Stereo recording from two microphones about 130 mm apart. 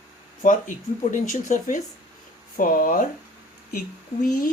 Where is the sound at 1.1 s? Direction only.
90° left.